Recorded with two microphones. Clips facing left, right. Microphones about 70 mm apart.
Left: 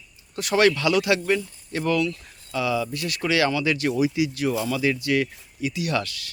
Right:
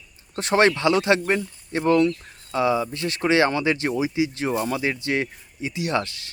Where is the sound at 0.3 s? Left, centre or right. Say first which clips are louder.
Right 1 dB; right.